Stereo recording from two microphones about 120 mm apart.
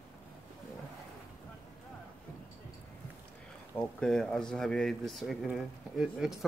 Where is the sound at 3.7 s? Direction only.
5° left (ahead or behind).